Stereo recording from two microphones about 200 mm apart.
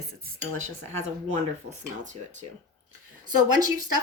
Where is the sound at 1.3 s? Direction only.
35° right (ahead or behind).